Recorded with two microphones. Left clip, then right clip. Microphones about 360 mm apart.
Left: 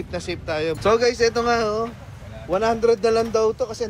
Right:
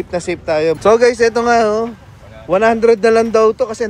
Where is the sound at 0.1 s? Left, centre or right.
Right.